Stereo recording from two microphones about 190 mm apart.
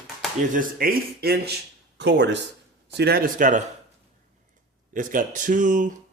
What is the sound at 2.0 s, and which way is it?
Speech, 65° right (ahead or behind).